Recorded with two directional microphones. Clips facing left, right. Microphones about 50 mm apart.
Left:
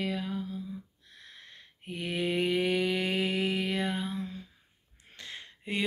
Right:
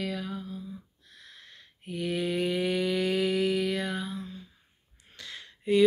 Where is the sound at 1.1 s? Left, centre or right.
Left.